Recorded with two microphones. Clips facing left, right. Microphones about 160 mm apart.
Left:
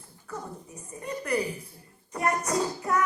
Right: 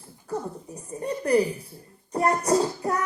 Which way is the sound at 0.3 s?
35° right (ahead or behind).